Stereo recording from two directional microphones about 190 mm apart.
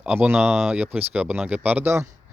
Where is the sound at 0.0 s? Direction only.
10° right (ahead or behind).